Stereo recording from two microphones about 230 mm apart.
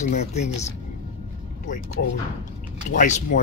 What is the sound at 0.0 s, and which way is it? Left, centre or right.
Speech, left.